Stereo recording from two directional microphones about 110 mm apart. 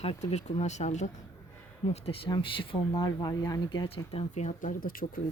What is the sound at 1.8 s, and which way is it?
Speech, 65° left (ahead or behind).